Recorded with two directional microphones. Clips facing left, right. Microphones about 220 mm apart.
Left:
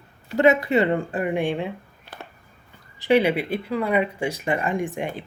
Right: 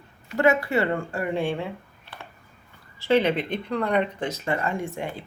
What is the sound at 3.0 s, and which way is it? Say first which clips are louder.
A woman's voice: left 2 dB; 15° left (ahead or behind).